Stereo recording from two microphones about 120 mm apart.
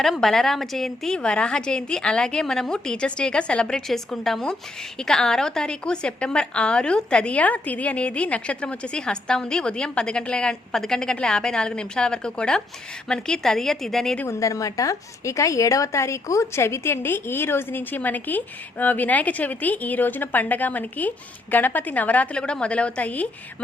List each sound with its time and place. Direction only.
0.0 s a woman's voice: centre (ahead or behind)
14.3 s a woman's voice: 25° left (ahead or behind)